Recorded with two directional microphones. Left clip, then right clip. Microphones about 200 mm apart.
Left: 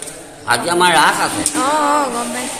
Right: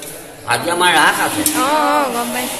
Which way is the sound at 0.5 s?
60° left (ahead or behind).